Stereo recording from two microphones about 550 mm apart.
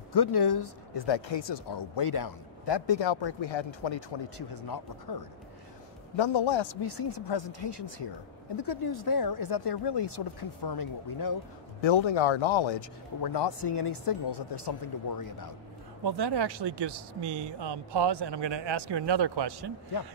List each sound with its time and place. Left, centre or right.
0.1 s speech: left
6.1 s speech: left
11.8 s speech: left
16.0 s speech: right